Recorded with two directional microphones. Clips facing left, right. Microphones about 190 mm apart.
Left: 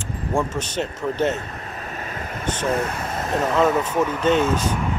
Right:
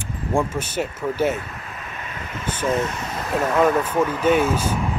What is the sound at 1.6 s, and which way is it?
Vehicle, 40° left (ahead or behind).